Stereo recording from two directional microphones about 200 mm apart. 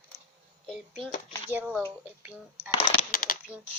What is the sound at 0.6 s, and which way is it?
A child's voice, centre (ahead or behind).